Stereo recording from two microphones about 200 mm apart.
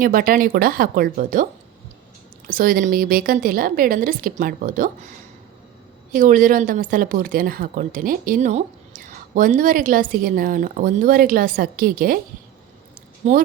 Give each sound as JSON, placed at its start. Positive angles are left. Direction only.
{"t": 0.0, "sound": "speech", "side_deg": -45}
{"t": 2.5, "sound": "speech", "side_deg": -45}
{"t": 6.1, "sound": "speech", "side_deg": -40}
{"t": 13.2, "sound": "a woman's voice", "side_deg": -35}